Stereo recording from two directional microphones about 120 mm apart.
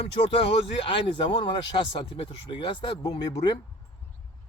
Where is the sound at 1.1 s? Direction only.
45° left (ahead or behind).